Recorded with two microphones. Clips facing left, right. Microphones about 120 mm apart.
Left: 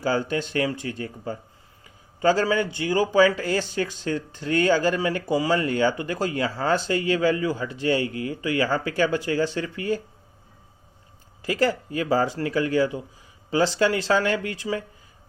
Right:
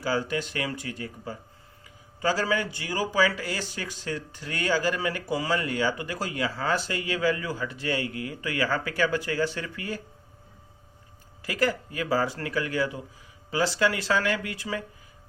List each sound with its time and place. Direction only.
0.0 s speech: 25° left (ahead or behind)
11.4 s speech: 30° left (ahead or behind)